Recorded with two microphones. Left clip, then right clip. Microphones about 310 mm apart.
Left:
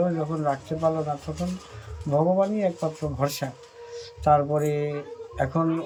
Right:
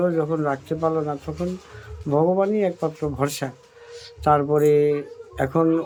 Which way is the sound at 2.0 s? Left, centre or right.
Centre.